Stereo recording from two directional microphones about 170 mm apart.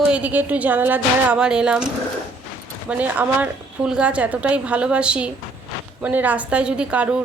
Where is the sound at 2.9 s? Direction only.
10° right (ahead or behind).